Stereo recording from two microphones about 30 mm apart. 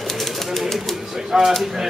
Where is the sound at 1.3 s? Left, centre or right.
Centre.